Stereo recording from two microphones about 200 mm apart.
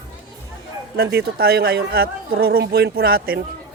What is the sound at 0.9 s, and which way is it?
Speech, 55° right (ahead or behind).